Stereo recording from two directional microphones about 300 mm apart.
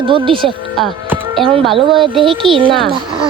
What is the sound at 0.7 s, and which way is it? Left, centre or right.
Music, centre.